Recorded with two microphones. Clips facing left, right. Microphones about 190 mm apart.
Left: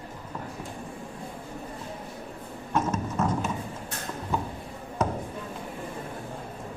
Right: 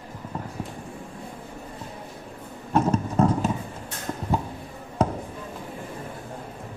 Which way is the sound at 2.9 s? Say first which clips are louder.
Right 5 dB; 35° right (ahead or behind).